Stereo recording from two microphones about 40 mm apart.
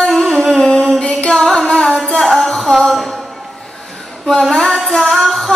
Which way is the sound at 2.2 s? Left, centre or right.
Centre.